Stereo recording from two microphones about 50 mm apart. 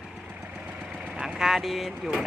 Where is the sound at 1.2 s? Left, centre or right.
Centre.